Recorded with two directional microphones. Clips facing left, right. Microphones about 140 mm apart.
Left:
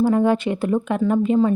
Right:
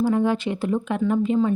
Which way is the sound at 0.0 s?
50° left (ahead or behind).